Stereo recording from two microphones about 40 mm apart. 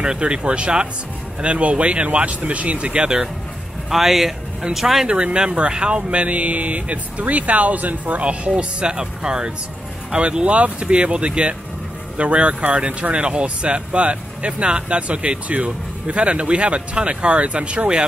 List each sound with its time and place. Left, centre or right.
0.0 s speech: right
3.9 s speech: centre
5.0 s speech: right